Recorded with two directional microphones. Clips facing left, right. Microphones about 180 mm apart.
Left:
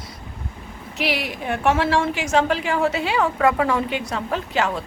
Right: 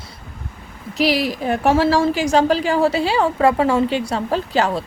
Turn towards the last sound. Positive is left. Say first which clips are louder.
# right 4 dB
turn(degrees=-35)  # may be behind; listen again after turning